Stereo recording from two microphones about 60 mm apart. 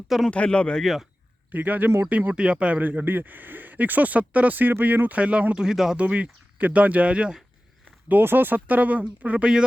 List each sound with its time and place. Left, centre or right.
0.3 s speech: centre
0.8 s speech: centre
1.5 s speech: right
5.6 s speech: centre
6.0 s speech: centre
8.0 s speech: right